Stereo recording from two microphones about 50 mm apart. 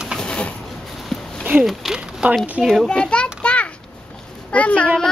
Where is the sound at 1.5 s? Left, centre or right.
Right.